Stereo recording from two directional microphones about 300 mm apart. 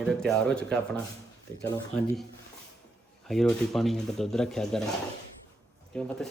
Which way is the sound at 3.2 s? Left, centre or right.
Centre.